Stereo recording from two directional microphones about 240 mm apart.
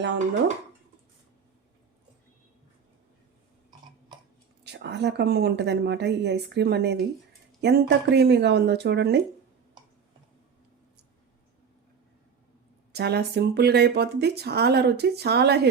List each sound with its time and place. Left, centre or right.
4.6 s speech: right
12.9 s speech: right